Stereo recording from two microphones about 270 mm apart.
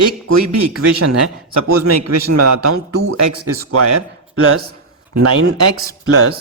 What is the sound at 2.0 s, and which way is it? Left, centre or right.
Speech, right.